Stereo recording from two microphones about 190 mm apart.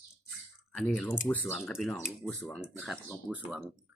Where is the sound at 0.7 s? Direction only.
5° left (ahead or behind).